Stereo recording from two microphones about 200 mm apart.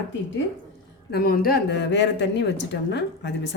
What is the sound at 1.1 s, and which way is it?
Speech, 45° left (ahead or behind).